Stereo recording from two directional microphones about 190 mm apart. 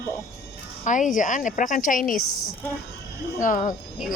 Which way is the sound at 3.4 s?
40° left (ahead or behind).